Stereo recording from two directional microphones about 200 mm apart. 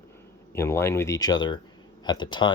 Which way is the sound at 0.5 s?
15° left (ahead or behind).